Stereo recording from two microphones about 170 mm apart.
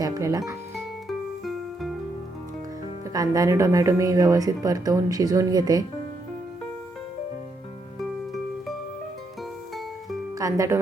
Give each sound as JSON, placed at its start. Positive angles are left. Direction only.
{"t": 0.0, "sound": "speech", "side_deg": -20}
{"t": 1.0, "sound": "music", "side_deg": 0}
{"t": 3.1, "sound": "speech", "side_deg": -20}
{"t": 7.9, "sound": "music", "side_deg": 0}
{"t": 10.3, "sound": "speech", "side_deg": -20}